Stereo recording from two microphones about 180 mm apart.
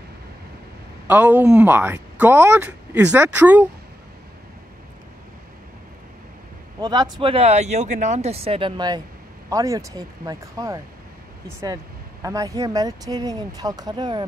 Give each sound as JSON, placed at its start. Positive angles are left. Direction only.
{"t": 1.0, "sound": "speech", "side_deg": -10}
{"t": 6.8, "sound": "speech", "side_deg": -20}